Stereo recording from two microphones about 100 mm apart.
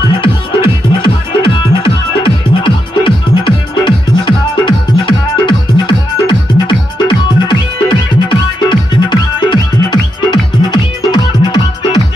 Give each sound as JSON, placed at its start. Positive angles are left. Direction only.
{"t": 0.2, "sound": "music", "side_deg": 55}